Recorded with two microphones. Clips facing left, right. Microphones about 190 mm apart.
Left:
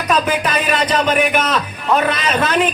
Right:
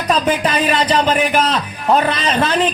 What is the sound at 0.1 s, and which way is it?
Speech, 30° right (ahead or behind).